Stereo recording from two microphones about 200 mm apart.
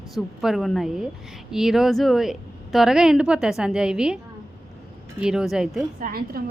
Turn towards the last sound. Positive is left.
turn(degrees=-50)  # may be behind; listen again after turning